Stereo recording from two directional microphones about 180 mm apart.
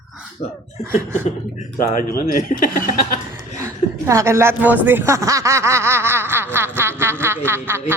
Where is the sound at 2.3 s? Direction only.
50° left (ahead or behind).